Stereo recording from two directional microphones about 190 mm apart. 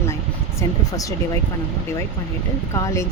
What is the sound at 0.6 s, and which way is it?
Speech, 15° left (ahead or behind).